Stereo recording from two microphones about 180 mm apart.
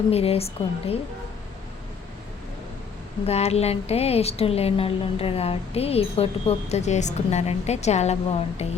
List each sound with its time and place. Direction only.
0.1 s speech: 35° left (ahead or behind)
3.2 s speech: 35° left (ahead or behind)